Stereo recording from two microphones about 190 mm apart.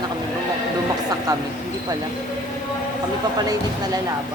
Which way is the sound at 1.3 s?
20° right (ahead or behind).